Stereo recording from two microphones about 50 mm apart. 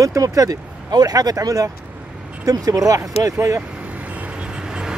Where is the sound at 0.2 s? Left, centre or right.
Right.